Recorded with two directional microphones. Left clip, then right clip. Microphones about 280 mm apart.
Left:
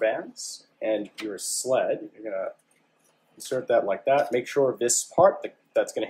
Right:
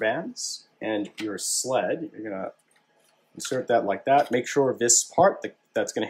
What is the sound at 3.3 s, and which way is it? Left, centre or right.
Speech, right.